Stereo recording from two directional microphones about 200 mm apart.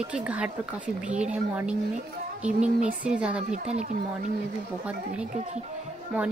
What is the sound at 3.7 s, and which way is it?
Speech, 35° right (ahead or behind).